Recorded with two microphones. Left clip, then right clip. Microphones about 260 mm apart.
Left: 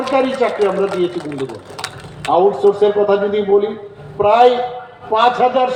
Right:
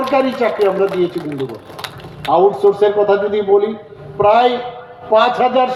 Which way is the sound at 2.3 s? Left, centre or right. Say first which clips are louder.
Right 1 dB; right.